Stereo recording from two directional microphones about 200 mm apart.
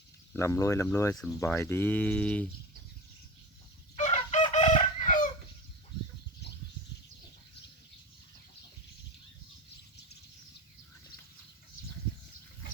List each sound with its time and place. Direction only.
0.3 s speech: 15° left (ahead or behind)
3.9 s chicken: 35° left (ahead or behind)